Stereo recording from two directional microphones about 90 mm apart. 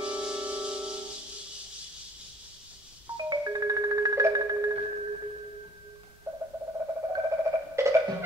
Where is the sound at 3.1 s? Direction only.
45° right (ahead or behind).